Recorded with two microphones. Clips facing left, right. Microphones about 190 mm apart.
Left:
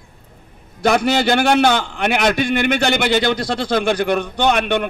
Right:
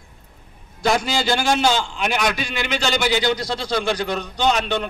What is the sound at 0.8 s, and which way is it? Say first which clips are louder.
A man's voice: left 5 dB; 60° left (ahead or behind).